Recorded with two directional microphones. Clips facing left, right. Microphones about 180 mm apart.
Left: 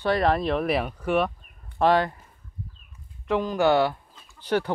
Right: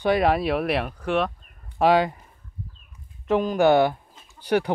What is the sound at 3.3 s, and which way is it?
Speech, 20° right (ahead or behind).